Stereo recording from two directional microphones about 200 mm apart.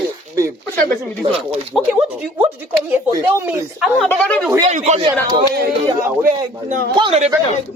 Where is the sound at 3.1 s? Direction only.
15° right (ahead or behind).